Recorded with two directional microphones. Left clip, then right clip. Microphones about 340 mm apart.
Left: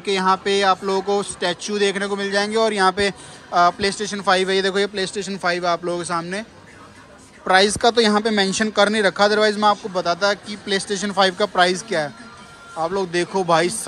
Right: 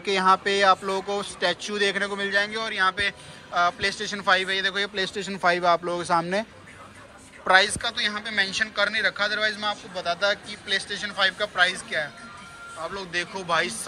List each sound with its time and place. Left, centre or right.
0.0 s speech: centre
7.4 s speech: centre